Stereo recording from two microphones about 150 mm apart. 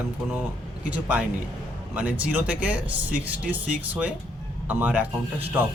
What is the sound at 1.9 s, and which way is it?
A man's voice, 10° right (ahead or behind).